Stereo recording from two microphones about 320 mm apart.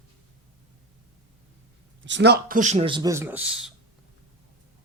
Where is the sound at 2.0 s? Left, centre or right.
Right; by 3.7 s centre.